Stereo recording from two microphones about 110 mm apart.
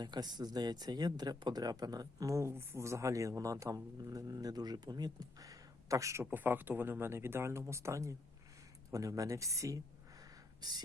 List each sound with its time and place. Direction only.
0.0 s speech: 40° right (ahead or behind)
6.3 s speech: 15° right (ahead or behind)
10.6 s speech: 40° right (ahead or behind)